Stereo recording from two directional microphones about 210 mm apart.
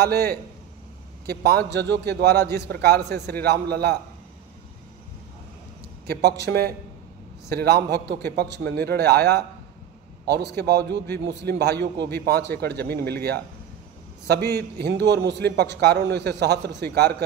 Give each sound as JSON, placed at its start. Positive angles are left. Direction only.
{"t": 0.0, "sound": "a man's voice", "side_deg": -50}
{"t": 6.4, "sound": "a man's voice", "side_deg": -50}